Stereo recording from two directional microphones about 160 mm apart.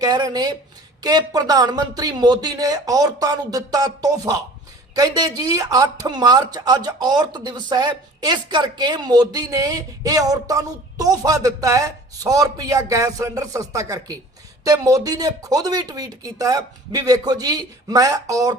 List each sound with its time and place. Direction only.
0.0 s a woman's voice: 25° right (ahead or behind)